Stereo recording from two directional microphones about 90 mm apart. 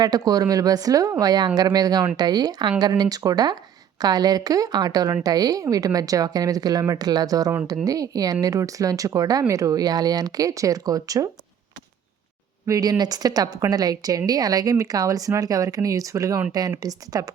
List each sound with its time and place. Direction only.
0.0 s a woman's voice: 45° right (ahead or behind)
12.6 s a woman's voice: 40° right (ahead or behind)